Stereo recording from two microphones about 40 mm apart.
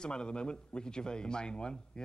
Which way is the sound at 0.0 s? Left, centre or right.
Left.